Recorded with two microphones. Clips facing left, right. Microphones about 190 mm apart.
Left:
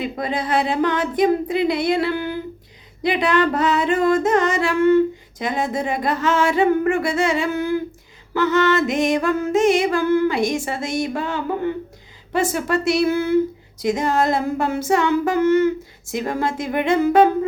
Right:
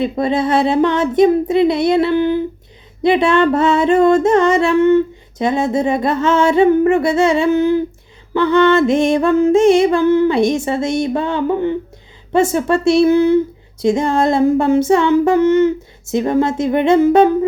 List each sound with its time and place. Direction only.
0.0 s female singing: 25° right (ahead or behind)